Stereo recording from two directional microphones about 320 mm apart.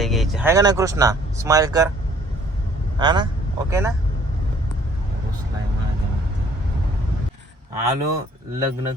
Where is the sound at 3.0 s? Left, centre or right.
Centre.